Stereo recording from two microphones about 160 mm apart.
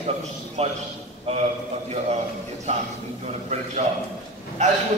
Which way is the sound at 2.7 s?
45° right (ahead or behind).